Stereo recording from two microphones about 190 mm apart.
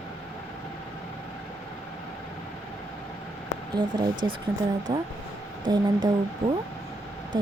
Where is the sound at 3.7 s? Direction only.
25° right (ahead or behind).